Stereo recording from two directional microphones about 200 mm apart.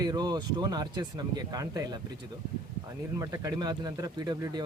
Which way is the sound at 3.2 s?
20° right (ahead or behind).